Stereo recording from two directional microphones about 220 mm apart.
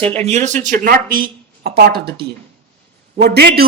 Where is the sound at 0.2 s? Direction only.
30° right (ahead or behind).